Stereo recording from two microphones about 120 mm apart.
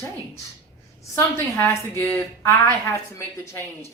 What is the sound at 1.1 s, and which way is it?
A woman's voice, 20° left (ahead or behind).